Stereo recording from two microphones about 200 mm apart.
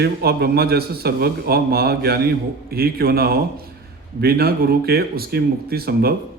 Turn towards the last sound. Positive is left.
turn(degrees=-50)  # may be behind; listen again after turning